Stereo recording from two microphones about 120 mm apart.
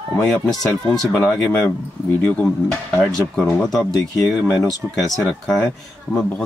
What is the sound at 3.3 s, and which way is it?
Speech, centre (ahead or behind).